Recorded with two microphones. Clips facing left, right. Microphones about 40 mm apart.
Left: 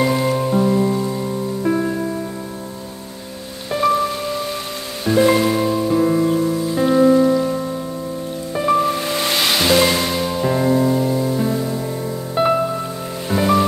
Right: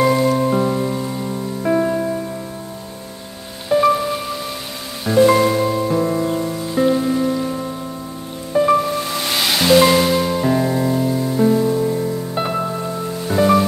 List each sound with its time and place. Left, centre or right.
0.0 s music: centre
3.7 s music: centre
5.0 s music: centre
7.0 s rain on surface: centre
8.5 s music: centre
9.0 s music: centre
9.4 s music: centre